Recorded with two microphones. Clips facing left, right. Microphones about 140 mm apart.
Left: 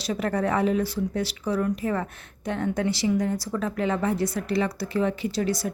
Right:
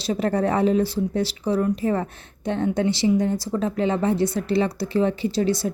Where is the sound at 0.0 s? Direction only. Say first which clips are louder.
Right 4 dB; 30° right (ahead or behind).